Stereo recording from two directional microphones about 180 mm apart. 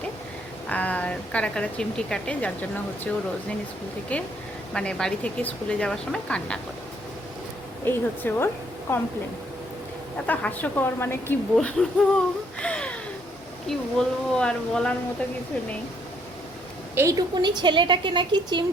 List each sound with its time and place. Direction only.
0.7 s speech: 10° left (ahead or behind)
4.1 s speech: 5° left (ahead or behind)
7.9 s speech: 10° left (ahead or behind)
10.2 s speech: 10° left (ahead or behind)
12.5 s a sound: 5° left (ahead or behind)
13.7 s speech: 5° left (ahead or behind)
16.9 s a woman's voice: 15° right (ahead or behind)